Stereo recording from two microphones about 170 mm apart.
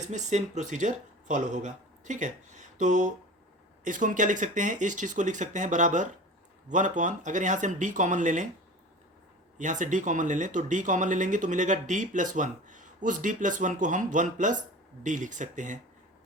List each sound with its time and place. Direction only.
0.1 s speech: 45° right (ahead or behind)
9.6 s speech: 45° right (ahead or behind)